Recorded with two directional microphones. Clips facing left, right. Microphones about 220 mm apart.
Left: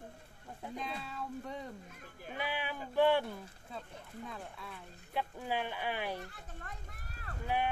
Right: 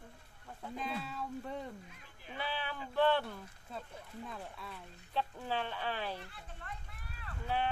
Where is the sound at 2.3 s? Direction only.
15° left (ahead or behind).